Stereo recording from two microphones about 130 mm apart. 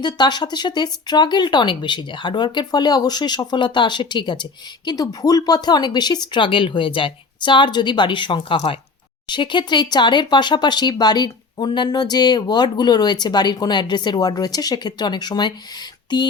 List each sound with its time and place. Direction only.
0.0 s speech: 35° left (ahead or behind)